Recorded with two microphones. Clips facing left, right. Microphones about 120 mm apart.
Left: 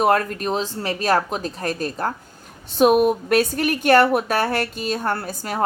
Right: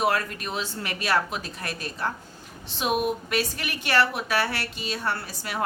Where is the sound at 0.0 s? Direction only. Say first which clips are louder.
Left 7 dB; 45° left (ahead or behind).